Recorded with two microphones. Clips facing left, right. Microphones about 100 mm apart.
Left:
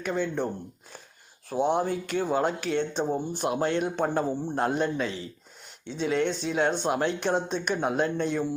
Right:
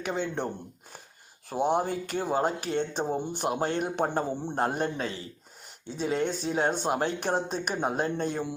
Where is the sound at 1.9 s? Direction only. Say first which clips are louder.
Left 2 dB; 45° right (ahead or behind).